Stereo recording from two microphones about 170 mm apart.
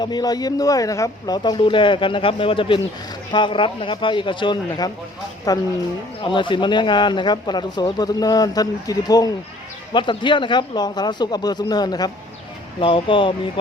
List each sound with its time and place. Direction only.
0.0 s speech: 25° left (ahead or behind)